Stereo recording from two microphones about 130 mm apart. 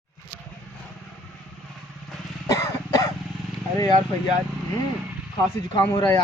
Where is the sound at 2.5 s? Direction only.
25° left (ahead or behind).